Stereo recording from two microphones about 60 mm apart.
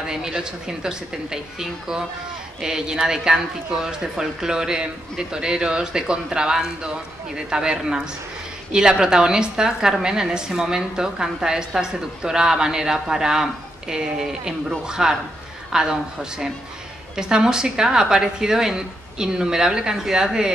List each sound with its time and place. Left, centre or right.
0.0 s a woman's voice: centre